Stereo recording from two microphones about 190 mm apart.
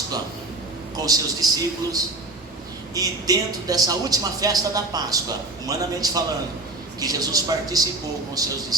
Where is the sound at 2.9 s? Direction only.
20° right (ahead or behind).